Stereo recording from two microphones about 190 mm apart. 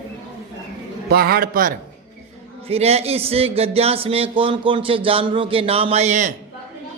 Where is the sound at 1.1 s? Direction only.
55° right (ahead or behind).